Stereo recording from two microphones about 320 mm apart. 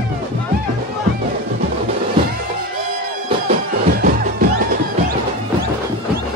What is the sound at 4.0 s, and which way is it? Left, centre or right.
Music, right.